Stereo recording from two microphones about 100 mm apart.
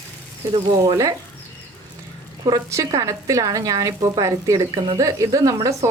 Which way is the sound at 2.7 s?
30° right (ahead or behind).